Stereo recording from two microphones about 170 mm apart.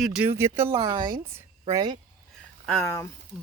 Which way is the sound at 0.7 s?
25° right (ahead or behind).